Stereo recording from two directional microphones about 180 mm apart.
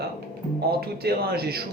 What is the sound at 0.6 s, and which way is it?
Speech, 60° right (ahead or behind).